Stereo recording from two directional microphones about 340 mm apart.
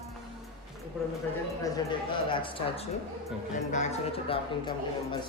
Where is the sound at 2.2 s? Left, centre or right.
Centre.